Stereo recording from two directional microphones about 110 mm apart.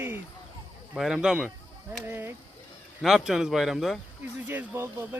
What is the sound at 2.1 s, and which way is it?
Speech, 20° right (ahead or behind).